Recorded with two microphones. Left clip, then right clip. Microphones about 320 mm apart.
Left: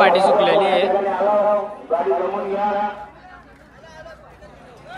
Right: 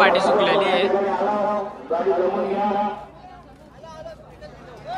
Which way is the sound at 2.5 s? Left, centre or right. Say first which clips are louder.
Left 1 dB; centre.